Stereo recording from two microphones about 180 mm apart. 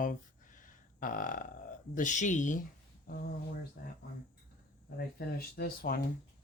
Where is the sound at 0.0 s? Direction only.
45° left (ahead or behind).